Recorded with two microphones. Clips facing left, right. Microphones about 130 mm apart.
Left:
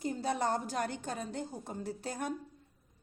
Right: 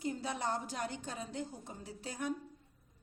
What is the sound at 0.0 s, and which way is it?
A woman's voice, 40° left (ahead or behind).